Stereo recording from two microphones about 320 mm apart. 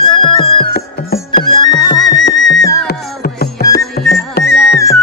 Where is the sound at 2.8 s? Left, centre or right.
Left.